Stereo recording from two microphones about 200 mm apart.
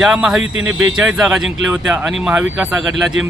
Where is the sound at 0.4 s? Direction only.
80° right.